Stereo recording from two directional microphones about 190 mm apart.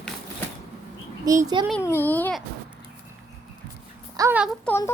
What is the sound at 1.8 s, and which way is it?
Speech, 10° left (ahead or behind).